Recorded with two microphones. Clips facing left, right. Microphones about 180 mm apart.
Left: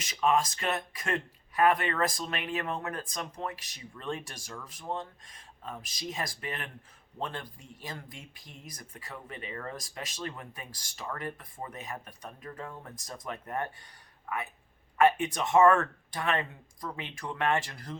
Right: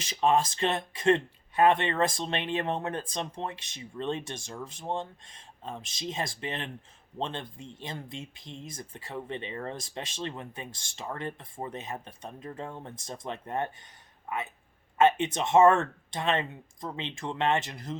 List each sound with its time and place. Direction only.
0.0 s speech: 30° right (ahead or behind)